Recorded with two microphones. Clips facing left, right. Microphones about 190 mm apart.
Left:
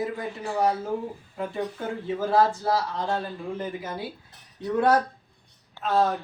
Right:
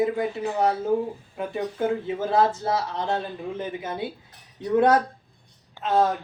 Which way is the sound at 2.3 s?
20° right (ahead or behind).